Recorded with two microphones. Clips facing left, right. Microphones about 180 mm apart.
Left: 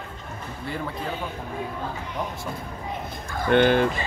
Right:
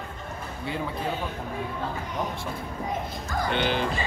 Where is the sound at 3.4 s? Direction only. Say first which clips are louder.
Left 9 dB; 50° left (ahead or behind).